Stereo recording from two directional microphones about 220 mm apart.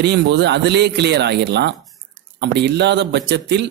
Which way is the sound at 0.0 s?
50° right (ahead or behind).